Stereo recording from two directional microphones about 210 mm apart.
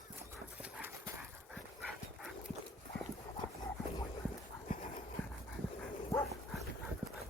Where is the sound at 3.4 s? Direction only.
25° right (ahead or behind).